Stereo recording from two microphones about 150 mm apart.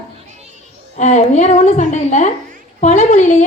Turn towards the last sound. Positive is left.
turn(degrees=50)  # may be behind; listen again after turning